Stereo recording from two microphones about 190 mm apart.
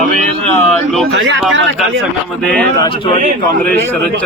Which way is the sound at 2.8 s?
25° left (ahead or behind).